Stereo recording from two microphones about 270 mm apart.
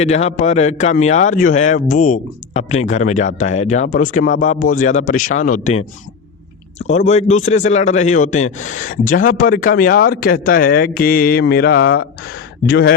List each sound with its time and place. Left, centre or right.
0.0 s a man's voice: left
6.8 s speech: left